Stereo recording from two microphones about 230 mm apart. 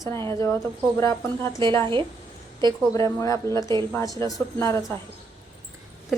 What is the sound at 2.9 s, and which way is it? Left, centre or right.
Speech, centre.